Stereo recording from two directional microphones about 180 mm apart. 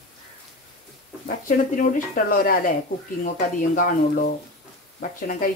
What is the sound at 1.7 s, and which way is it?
Speech, 50° left (ahead or behind).